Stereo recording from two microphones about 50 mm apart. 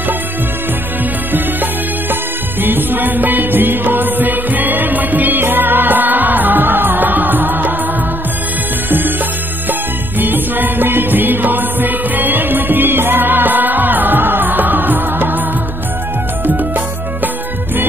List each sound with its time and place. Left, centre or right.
1.3 s music: right
9.7 s music: right
16.4 s music: right